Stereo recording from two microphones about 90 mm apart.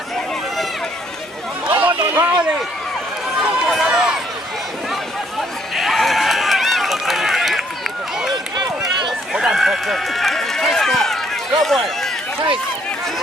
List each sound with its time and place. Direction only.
1.7 s chatter: 20° right (ahead or behind)
3.3 s run: centre (ahead or behind)
5.8 s run: centre (ahead or behind)
8.5 s run: 55° right (ahead or behind)
9.3 s run: 5° right (ahead or behind)